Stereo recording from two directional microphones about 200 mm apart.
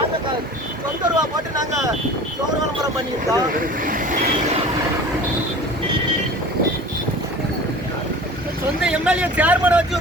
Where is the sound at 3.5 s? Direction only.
45° right (ahead or behind).